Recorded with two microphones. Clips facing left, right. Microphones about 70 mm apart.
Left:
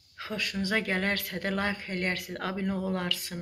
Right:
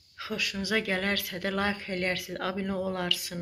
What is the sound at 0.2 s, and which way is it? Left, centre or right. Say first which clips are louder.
Speech: left 1 dB; left.